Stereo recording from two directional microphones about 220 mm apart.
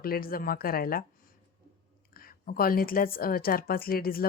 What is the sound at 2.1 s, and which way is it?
A woman's voice, 40° left (ahead or behind).